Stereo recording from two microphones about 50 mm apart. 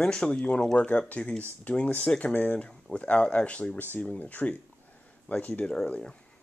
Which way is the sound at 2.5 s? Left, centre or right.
Left.